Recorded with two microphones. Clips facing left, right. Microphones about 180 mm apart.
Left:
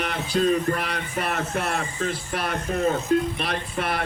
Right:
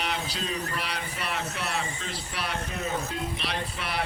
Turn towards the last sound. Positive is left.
turn(degrees=50)  # may be behind; listen again after turning